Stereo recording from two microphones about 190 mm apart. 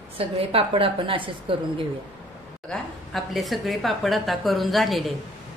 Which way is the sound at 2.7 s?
Centre (ahead or behind).